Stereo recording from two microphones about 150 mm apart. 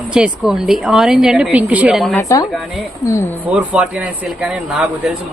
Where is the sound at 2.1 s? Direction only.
20° left (ahead or behind).